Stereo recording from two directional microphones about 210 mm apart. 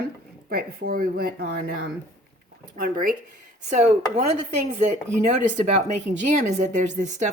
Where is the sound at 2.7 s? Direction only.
40° right (ahead or behind).